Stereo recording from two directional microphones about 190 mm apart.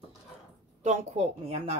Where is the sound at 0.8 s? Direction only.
35° right (ahead or behind).